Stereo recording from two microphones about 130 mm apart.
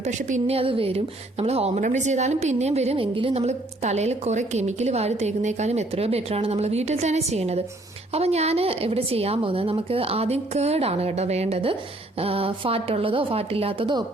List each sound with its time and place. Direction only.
0.0 s a woman's voice: 70° right (ahead or behind)
0.5 s a woman's voice: 45° right (ahead or behind)
1.8 s a woman's voice: 65° right (ahead or behind); by 14.0 s 40° right (ahead or behind)